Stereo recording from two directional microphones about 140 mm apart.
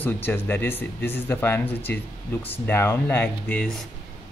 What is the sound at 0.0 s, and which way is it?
Speech, 15° left (ahead or behind).